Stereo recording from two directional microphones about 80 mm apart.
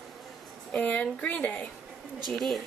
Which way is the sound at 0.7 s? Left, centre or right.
Centre.